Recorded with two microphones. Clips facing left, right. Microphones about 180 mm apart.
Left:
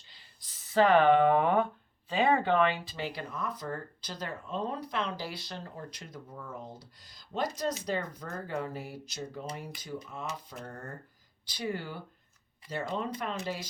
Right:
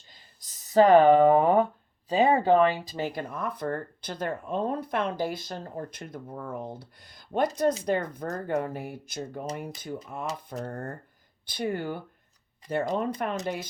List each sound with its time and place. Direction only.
0.1 s a sound: 45° right (ahead or behind)
2.0 s speech: 40° right (ahead or behind)
10.2 s speech: 40° right (ahead or behind)
13.3 s speech: 60° right (ahead or behind)